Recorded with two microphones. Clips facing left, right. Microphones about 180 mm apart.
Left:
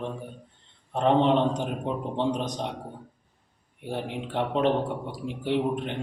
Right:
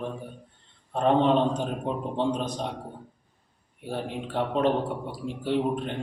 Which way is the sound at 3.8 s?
20° left (ahead or behind).